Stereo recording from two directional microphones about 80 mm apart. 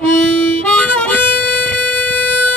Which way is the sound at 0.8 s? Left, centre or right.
Left.